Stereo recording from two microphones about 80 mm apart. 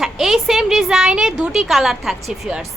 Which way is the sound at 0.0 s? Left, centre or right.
Centre.